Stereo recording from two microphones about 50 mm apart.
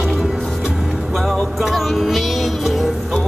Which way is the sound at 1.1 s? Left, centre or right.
Centre.